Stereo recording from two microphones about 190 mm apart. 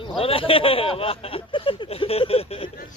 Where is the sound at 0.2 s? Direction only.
30° left (ahead or behind).